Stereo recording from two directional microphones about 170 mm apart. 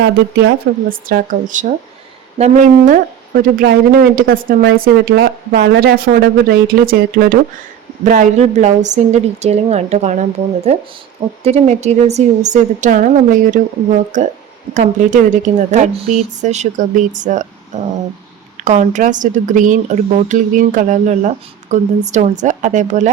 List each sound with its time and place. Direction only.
0.0 s speech: 70° right (ahead or behind)
8.0 s a woman's voice: 50° right (ahead or behind)